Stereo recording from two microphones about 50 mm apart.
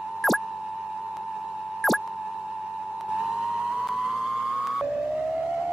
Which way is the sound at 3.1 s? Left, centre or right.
Centre.